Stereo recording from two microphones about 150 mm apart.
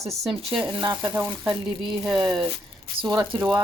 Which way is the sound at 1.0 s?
15° right (ahead or behind).